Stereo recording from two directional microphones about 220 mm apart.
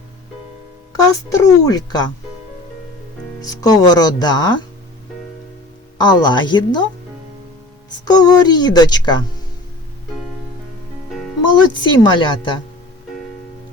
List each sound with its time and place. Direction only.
0.9 s speech: 15° left (ahead or behind)
3.4 s speech: 15° left (ahead or behind)
6.0 s a woman's voice: 20° left (ahead or behind)
8.0 s speech: 20° left (ahead or behind)
11.7 s a woman's voice: 20° left (ahead or behind)